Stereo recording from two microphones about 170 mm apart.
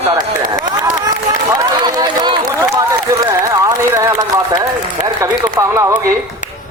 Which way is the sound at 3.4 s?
20° right (ahead or behind).